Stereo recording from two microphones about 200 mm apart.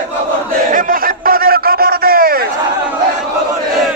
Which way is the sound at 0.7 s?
45° right (ahead or behind).